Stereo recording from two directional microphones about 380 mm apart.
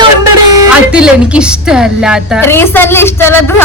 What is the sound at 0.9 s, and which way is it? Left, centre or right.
A woman's voice, centre.